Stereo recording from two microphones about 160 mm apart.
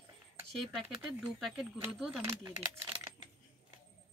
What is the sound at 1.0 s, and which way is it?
Speech, centre (ahead or behind).